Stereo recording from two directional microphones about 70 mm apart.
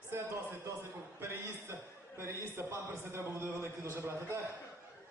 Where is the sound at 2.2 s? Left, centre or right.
Right.